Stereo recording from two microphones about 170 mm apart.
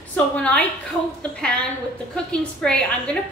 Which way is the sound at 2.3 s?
5° left (ahead or behind).